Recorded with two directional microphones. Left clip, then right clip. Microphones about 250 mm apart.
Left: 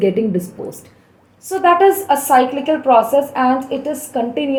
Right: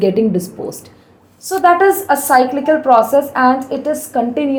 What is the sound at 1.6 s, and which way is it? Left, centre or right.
A woman's voice, right.